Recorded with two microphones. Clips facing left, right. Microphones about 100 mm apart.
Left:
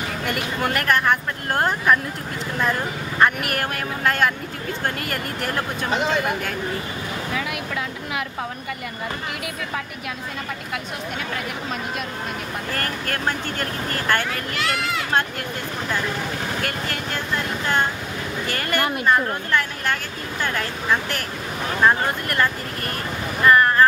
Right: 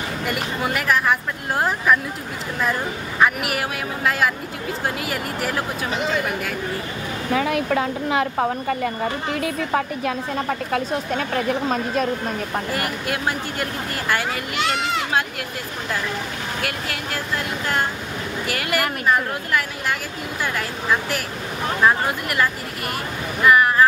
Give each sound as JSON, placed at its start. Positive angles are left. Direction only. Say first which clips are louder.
{"t": 0.2, "sound": "speech", "louder": "even", "side_deg": 0}
{"t": 7.3, "sound": "a woman's voice", "louder": "right 10 dB", "side_deg": -40}
{"t": 12.7, "sound": "speech", "louder": "right 2 dB", "side_deg": -10}
{"t": 16.6, "sound": "speech", "louder": "even", "side_deg": -5}
{"t": 18.5, "sound": "speech", "louder": "even", "side_deg": -5}